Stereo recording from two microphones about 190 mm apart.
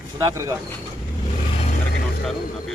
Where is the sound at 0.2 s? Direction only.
15° right (ahead or behind).